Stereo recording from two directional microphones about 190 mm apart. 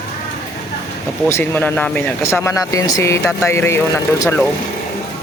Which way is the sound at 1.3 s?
10° left (ahead or behind).